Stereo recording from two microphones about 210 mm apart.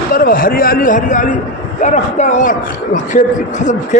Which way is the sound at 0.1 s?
40° left (ahead or behind).